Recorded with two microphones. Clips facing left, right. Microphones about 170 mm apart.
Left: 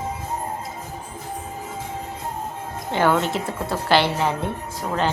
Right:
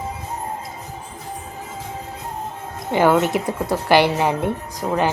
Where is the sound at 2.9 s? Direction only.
10° right (ahead or behind).